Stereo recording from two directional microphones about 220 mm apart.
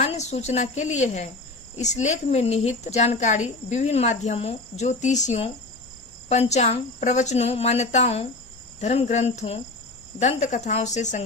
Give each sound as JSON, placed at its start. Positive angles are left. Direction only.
{"t": 0.0, "sound": "a woman's voice", "side_deg": 30}